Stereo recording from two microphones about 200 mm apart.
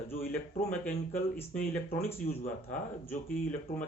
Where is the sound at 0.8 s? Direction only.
10° left (ahead or behind).